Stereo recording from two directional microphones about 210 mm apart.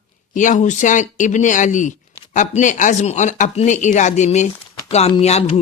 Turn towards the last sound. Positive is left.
turn(degrees=30)  # may be behind; listen again after turning